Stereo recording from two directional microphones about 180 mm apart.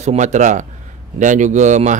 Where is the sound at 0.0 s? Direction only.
40° right (ahead or behind).